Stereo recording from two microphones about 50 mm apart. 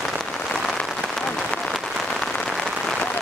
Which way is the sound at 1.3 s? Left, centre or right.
Centre.